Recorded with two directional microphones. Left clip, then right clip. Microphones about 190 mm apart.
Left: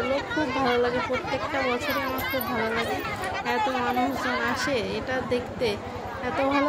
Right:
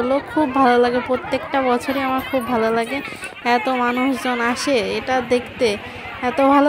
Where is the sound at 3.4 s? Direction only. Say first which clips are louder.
Right 9 dB; 45° right (ahead or behind).